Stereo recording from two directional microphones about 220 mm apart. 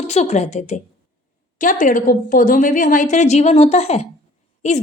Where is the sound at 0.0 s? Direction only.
30° left (ahead or behind).